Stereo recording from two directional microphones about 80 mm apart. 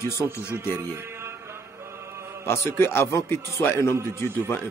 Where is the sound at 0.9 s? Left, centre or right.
Right.